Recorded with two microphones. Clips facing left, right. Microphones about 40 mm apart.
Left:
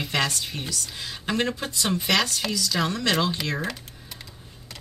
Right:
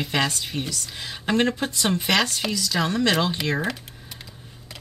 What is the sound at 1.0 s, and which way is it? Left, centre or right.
Speech, centre.